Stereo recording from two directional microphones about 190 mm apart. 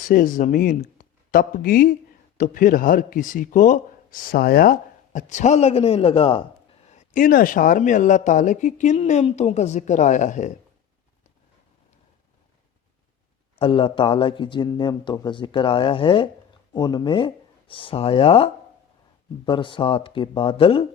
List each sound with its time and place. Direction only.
0.1 s speech: 45° left (ahead or behind); by 6.4 s 30° left (ahead or behind)
6.9 s speech: 40° left (ahead or behind)
13.6 s a man's voice: 30° left (ahead or behind)